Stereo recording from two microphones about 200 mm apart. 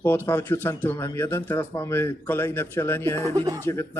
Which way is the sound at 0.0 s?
10° left (ahead or behind).